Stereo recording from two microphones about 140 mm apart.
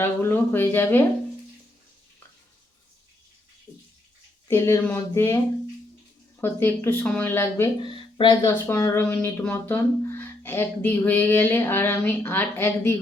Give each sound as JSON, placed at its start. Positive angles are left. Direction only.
{"t": 0.0, "sound": "speech", "side_deg": 15}
{"t": 4.4, "sound": "speech", "side_deg": 20}
{"t": 6.4, "sound": "speech", "side_deg": 15}
{"t": 7.8, "sound": "speech", "side_deg": 35}
{"t": 8.4, "sound": "speech", "side_deg": 20}